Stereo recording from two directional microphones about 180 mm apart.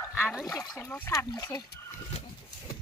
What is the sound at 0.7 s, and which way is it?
Speech, 10° left (ahead or behind).